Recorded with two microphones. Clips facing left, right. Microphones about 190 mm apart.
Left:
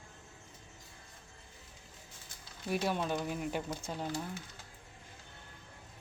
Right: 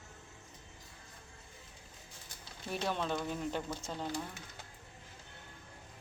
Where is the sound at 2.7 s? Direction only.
10° left (ahead or behind).